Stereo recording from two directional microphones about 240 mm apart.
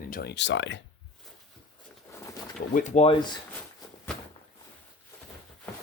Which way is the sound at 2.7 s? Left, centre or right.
Left.